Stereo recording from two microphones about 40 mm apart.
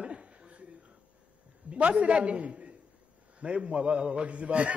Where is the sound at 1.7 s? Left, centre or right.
Right.